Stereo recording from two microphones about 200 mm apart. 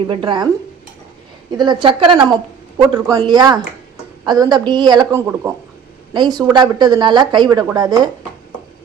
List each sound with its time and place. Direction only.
0.1 s speech: 25° right (ahead or behind)
1.5 s speech: 20° right (ahead or behind)